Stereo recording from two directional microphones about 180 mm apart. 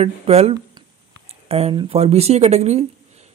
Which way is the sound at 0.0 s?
35° right (ahead or behind).